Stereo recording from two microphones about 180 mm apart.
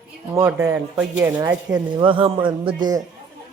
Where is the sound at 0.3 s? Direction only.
15° right (ahead or behind).